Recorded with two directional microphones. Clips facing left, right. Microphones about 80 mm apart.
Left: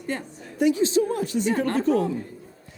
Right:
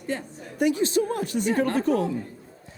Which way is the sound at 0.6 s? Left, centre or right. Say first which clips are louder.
Left 2 dB; right.